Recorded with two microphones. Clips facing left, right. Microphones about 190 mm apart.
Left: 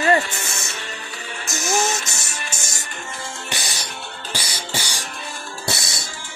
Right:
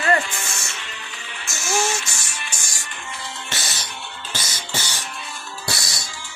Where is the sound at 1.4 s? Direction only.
40° left (ahead or behind).